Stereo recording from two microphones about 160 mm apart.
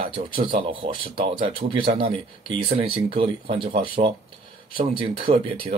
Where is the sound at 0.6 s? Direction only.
35° right (ahead or behind).